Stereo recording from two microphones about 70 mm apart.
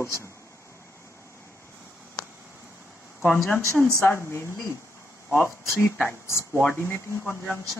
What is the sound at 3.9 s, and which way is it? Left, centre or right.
Speech, left.